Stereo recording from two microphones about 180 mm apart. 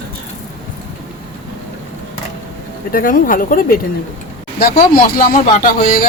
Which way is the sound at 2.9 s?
50° left (ahead or behind).